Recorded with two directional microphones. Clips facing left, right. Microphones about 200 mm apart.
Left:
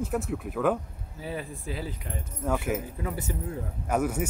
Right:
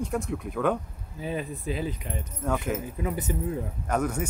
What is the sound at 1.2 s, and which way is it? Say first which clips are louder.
Speech: right 4 dB; 20° right (ahead or behind).